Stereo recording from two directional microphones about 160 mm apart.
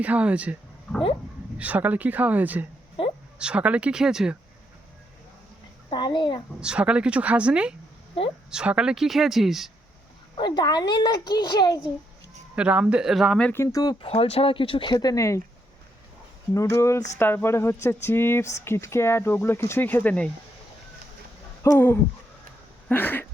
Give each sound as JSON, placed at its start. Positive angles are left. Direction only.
{"t": 0.0, "sound": "speech", "side_deg": -10}
{"t": 1.5, "sound": "speech", "side_deg": -10}
{"t": 5.9, "sound": "a child's voice", "side_deg": 30}
{"t": 6.6, "sound": "speech", "side_deg": -5}
{"t": 10.3, "sound": "a child's voice", "side_deg": 30}
{"t": 12.5, "sound": "speech", "side_deg": -5}
{"t": 13.5, "sound": "a child's voice", "side_deg": 20}
{"t": 14.1, "sound": "speech", "side_deg": 35}
{"t": 16.6, "sound": "speech", "side_deg": 20}
{"t": 21.6, "sound": "a sound", "side_deg": 15}
{"t": 22.9, "sound": "speech", "side_deg": 10}